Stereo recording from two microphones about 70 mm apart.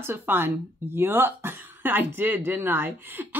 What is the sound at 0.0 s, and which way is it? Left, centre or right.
A woman's voice, right.